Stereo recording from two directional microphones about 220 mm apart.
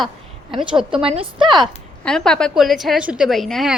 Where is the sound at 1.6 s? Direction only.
Centre (ahead or behind).